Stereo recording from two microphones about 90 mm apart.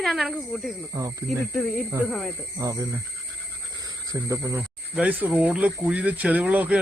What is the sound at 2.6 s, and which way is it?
Speech, 40° right (ahead or behind).